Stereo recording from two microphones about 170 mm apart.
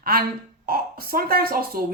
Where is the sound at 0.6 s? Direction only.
60° right (ahead or behind).